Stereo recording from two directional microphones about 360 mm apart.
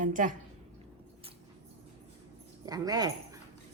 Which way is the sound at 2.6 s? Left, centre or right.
Centre.